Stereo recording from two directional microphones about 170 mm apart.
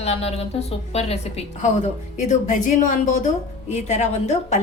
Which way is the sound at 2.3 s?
50° left (ahead or behind).